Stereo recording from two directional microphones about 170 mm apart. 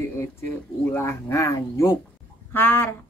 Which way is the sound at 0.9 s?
15° left (ahead or behind).